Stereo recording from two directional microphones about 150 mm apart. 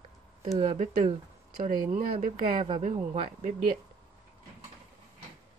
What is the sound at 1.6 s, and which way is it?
Speech, 60° right (ahead or behind).